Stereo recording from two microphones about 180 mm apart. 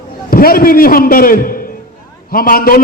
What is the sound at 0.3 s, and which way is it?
A man's voice, 55° left (ahead or behind).